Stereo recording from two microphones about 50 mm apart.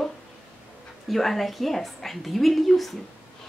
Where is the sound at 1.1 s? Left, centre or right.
Centre.